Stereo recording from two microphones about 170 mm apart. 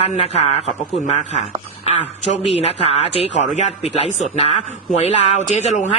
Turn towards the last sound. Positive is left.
turn(degrees=40)  # may be behind; listen again after turning